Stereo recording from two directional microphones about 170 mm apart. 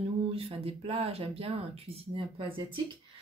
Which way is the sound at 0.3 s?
35° right (ahead or behind).